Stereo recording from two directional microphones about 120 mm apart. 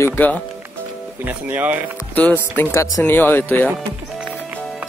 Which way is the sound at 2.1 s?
15° left (ahead or behind).